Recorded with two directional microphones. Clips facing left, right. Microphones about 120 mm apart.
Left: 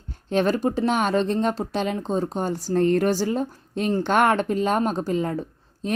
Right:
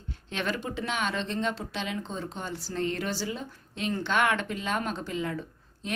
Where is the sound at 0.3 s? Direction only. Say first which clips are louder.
Left 11 dB; 40° left (ahead or behind).